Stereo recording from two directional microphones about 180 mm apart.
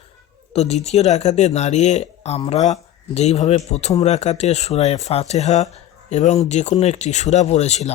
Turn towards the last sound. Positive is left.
turn(degrees=40)  # may be behind; listen again after turning